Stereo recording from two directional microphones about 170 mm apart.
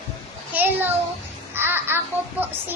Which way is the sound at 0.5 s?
10° right (ahead or behind).